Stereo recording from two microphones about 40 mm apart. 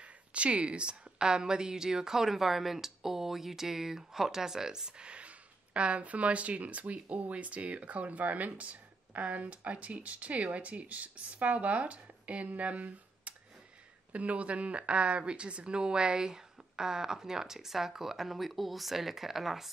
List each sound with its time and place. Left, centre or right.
0.0 s speech: right; by 19.7 s centre